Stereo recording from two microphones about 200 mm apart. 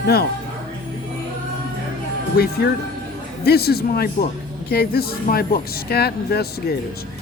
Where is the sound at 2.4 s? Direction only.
55° left (ahead or behind).